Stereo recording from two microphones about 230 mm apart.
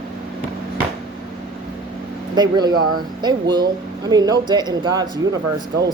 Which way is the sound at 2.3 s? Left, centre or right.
Centre.